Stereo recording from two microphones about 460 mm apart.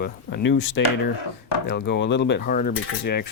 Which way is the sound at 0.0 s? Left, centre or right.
Left.